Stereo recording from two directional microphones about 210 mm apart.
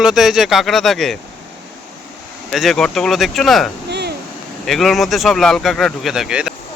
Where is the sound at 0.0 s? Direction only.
Centre (ahead or behind).